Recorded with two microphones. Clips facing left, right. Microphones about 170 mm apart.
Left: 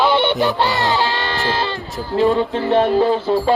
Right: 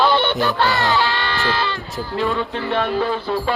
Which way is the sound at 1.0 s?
40° left (ahead or behind).